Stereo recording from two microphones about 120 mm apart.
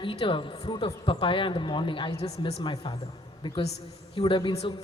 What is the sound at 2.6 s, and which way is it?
Speech, 40° left (ahead or behind).